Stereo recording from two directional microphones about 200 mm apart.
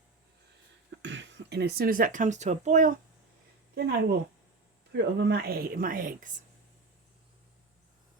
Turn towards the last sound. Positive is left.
turn(degrees=-45)  # may be behind; listen again after turning